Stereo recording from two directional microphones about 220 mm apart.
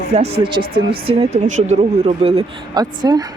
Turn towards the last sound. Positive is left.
turn(degrees=-20)  # may be behind; listen again after turning